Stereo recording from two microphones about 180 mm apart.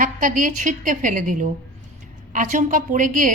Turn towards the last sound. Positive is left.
turn(degrees=-45)  # may be behind; listen again after turning